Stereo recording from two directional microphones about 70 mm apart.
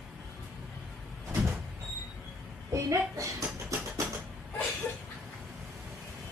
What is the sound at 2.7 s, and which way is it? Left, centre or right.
Speech, right.